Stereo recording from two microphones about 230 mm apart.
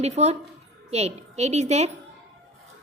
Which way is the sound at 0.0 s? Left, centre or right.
Right.